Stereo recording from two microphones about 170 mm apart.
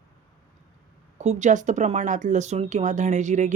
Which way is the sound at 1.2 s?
45° right (ahead or behind).